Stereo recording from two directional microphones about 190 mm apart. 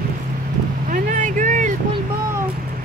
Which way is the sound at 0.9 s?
45° right (ahead or behind).